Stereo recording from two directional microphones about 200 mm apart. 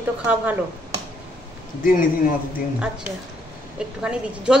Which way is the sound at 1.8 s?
45° left (ahead or behind).